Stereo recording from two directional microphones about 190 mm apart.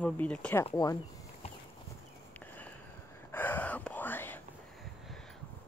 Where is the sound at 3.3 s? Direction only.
10° left (ahead or behind).